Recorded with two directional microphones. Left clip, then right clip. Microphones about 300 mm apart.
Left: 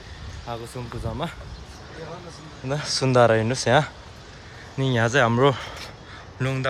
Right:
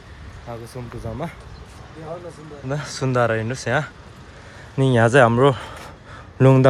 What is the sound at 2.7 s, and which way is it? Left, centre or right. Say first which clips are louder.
Speech: left 2 dB; centre.